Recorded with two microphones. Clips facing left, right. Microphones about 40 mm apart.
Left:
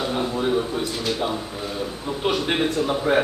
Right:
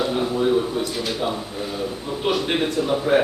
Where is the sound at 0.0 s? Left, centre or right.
Centre.